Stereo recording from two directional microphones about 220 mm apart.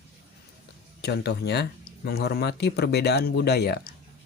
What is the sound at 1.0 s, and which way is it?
Speech, 50° left (ahead or behind).